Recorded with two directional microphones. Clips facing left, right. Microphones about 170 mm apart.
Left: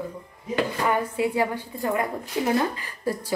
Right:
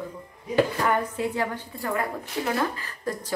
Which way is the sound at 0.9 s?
10° left (ahead or behind).